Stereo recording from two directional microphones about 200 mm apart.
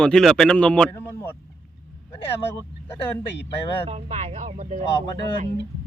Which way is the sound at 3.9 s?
35° right (ahead or behind).